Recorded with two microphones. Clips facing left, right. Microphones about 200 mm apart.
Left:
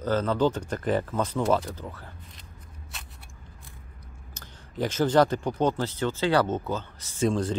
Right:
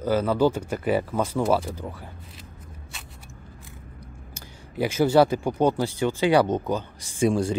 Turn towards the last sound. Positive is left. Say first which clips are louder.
# right 3 dB
turn(degrees=-10)  # may be behind; listen again after turning